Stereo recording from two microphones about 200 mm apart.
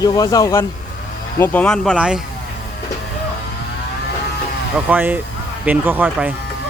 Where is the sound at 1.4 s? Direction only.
5° left (ahead or behind).